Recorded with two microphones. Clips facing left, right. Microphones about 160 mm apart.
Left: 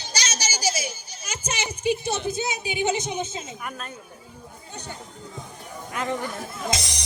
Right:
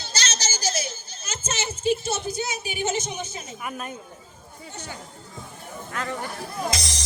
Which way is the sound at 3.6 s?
10° right (ahead or behind).